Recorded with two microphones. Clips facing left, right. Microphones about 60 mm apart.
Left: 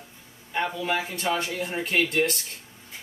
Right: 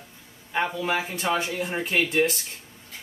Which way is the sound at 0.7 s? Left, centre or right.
Centre.